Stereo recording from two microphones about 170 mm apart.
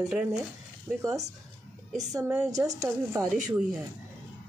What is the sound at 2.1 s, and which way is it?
A woman's voice, 15° right (ahead or behind).